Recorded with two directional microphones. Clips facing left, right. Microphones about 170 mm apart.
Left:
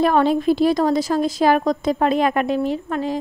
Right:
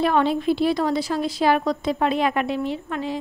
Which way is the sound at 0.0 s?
45° left (ahead or behind).